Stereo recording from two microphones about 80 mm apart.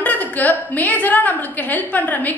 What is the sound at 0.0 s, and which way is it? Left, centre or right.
A woman's voice, left.